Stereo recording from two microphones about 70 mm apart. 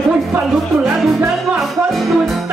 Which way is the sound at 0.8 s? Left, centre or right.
Centre.